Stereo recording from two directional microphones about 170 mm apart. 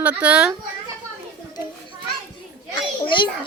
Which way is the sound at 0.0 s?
5° right (ahead or behind).